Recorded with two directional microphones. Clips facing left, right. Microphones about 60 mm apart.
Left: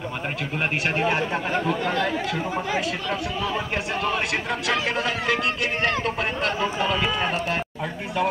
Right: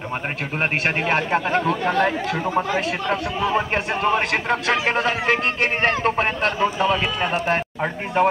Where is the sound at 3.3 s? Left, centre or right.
Right.